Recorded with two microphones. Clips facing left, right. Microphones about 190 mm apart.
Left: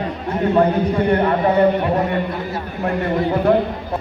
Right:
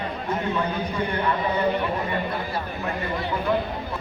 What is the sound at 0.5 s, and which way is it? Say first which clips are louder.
A man's voice: left 10 dB; 55° left (ahead or behind).